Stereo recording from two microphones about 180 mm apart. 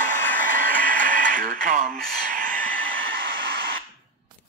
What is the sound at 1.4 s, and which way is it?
Radio, 45° right (ahead or behind).